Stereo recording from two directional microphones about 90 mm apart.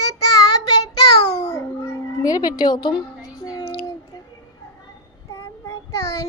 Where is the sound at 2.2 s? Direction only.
45° left (ahead or behind).